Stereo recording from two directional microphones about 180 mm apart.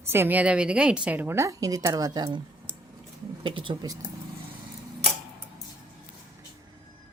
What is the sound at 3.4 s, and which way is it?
Speech, 25° right (ahead or behind).